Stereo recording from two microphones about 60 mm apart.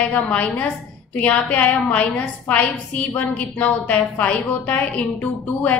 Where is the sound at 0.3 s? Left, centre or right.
Left.